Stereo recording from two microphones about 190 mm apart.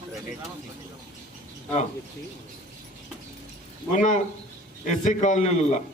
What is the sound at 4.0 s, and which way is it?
A man's voice, 40° left (ahead or behind).